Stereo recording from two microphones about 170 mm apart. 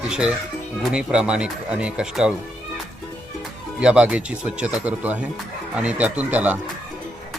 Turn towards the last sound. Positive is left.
turn(degrees=-10)  # may be behind; listen again after turning